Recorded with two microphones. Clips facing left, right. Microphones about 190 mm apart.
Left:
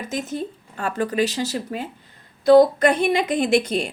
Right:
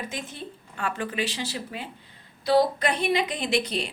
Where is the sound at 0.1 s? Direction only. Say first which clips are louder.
Left 9 dB; 45° left (ahead or behind).